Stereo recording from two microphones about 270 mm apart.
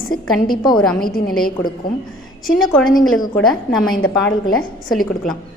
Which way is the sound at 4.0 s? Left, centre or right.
Left.